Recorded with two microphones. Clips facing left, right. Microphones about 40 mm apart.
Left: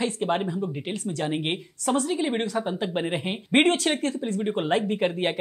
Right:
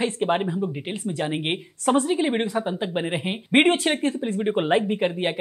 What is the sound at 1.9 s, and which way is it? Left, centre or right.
Speech, right.